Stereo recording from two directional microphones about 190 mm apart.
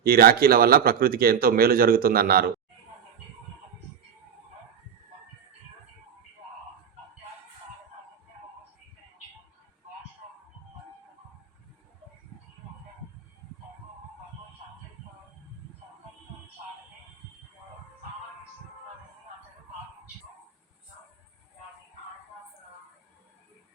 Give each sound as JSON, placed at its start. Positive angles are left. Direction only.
{"t": 0.0, "sound": "speech", "side_deg": -50}